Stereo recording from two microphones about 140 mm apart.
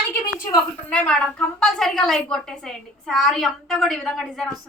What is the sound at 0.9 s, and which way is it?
A woman's voice, 5° left (ahead or behind).